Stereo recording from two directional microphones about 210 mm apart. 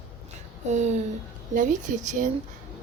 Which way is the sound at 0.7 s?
35° right (ahead or behind).